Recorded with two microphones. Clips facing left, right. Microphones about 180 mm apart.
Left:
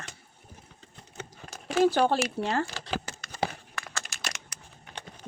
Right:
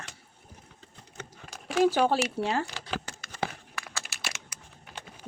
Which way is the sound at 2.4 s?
15° right (ahead or behind).